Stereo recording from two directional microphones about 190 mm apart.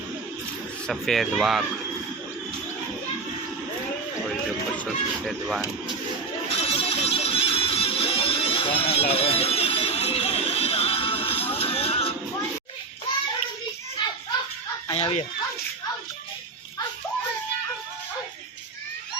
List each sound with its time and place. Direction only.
0.9 s speech: centre (ahead or behind)
5.2 s speech: centre (ahead or behind)
6.5 s music: 30° left (ahead or behind)
14.9 s speech: 35° left (ahead or behind)